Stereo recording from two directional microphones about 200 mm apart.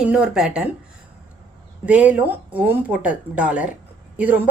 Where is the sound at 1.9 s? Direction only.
5° right (ahead or behind).